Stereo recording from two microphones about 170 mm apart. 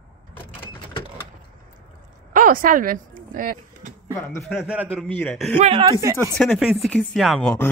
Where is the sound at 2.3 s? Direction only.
55° right (ahead or behind).